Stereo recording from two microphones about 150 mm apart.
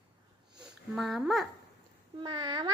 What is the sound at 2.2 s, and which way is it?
Speech, 30° right (ahead or behind).